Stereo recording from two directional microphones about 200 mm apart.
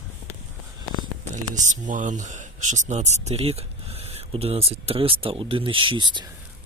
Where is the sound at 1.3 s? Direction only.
40° right (ahead or behind); by 6.3 s 20° right (ahead or behind).